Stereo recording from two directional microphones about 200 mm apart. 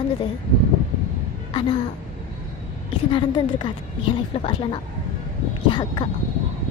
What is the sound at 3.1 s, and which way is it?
Speech, 25° left (ahead or behind).